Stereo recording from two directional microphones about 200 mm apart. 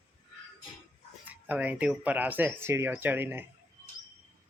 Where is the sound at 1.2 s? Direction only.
10° right (ahead or behind).